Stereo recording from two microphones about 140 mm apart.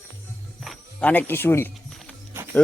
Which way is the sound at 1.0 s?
10° left (ahead or behind).